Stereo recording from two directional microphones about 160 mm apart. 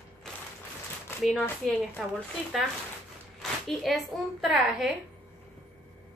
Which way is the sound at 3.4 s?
Centre (ahead or behind).